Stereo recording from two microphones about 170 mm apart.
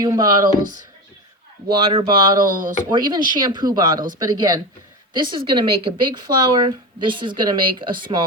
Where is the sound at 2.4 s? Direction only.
55° right (ahead or behind).